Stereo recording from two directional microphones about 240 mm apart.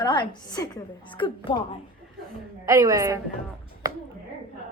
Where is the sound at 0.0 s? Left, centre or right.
Centre.